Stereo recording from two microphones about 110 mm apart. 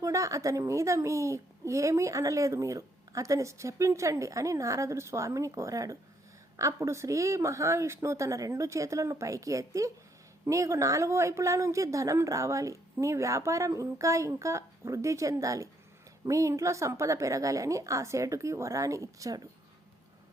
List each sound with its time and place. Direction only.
0.0 s a woman's voice: 30° right (ahead or behind)